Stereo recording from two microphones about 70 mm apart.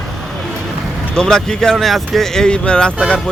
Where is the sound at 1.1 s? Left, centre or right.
Centre.